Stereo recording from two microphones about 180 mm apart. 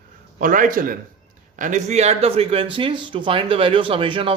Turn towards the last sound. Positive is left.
turn(degrees=-30)  # may be behind; listen again after turning